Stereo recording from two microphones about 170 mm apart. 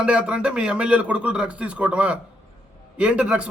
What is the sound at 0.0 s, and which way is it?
Speech, 5° right (ahead or behind).